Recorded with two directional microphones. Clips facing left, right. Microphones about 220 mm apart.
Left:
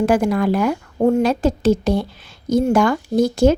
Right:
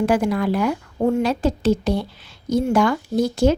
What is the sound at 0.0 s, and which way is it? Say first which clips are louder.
A woman's voice: left 3 dB; 45° left (ahead or behind).